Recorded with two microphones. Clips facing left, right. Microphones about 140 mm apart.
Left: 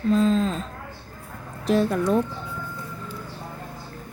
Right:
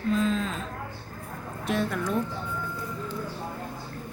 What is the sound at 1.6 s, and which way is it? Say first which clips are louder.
Speech: left 7 dB; 35° left (ahead or behind).